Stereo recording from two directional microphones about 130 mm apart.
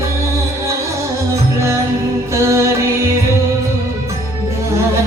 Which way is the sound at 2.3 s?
20° right (ahead or behind).